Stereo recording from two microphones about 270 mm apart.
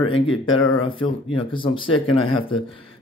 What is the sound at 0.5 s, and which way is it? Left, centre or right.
Speech, left.